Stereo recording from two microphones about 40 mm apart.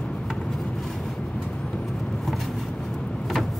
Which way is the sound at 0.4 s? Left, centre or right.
Centre.